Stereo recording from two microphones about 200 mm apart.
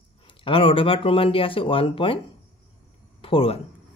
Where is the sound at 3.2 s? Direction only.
30° left (ahead or behind).